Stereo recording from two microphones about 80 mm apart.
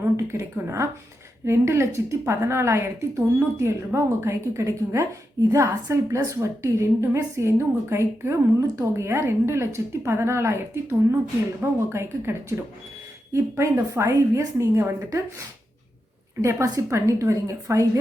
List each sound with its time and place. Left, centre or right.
0.0 s a woman's voice: right
8.6 s speech: right
8.9 s a woman's voice: right
16.4 s a woman's voice: right